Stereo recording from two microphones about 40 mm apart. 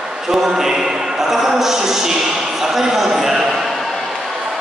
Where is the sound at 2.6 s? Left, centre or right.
Centre.